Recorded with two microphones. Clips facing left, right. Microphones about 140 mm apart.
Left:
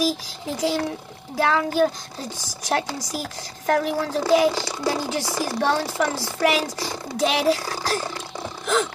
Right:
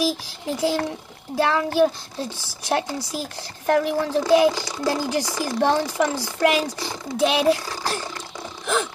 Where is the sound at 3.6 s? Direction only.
15° right (ahead or behind).